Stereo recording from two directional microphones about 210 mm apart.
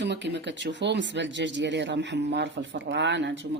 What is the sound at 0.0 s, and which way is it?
Speech, 55° right (ahead or behind).